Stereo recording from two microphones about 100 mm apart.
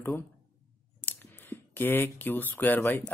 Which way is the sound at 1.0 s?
20° left (ahead or behind).